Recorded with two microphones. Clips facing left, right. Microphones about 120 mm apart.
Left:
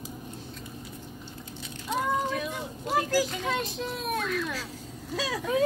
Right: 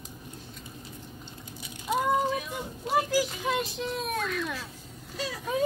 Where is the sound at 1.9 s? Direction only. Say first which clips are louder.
Right 2 dB; 10° right (ahead or behind).